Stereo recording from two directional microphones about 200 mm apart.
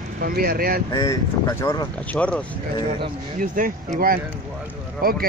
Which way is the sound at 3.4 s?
45° right (ahead or behind).